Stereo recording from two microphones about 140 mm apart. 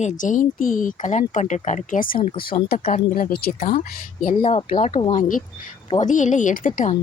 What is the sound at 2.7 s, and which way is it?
Speech, 90° left.